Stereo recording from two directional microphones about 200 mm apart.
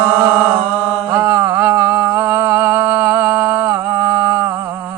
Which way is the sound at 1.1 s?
15° right (ahead or behind).